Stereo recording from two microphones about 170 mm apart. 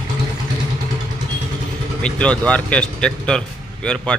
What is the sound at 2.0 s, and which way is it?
A man's voice, 5° left (ahead or behind).